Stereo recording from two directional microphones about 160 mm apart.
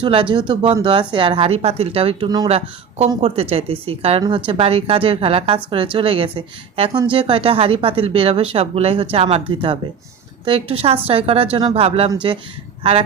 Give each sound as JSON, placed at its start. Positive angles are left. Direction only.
{"t": 0.0, "sound": "speech", "side_deg": -30}
{"t": 2.5, "sound": "speech", "side_deg": -40}